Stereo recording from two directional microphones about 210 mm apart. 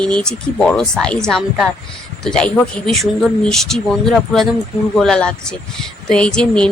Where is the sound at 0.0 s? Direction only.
5° left (ahead or behind).